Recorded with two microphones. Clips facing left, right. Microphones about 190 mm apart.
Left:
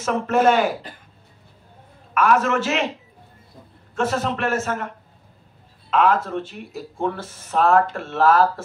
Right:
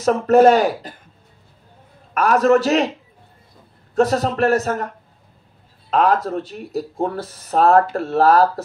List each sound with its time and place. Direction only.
0.0 s speech: 40° right (ahead or behind)
2.1 s speech: 40° right (ahead or behind)
3.9 s speech: 35° right (ahead or behind)